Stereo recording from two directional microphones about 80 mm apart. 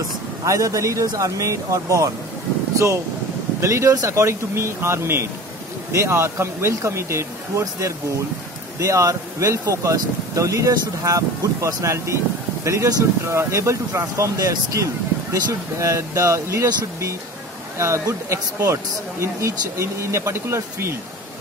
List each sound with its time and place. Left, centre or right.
0.5 s speech: right
3.6 s speech: right
17.7 s speech: right